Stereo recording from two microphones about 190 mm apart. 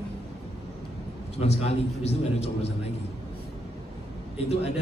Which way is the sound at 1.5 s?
35° left (ahead or behind).